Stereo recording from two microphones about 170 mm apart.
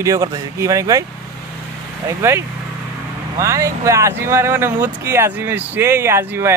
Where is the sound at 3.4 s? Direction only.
20° right (ahead or behind).